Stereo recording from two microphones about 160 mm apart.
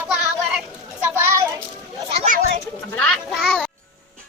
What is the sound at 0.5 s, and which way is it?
Children playing, 10° right (ahead or behind).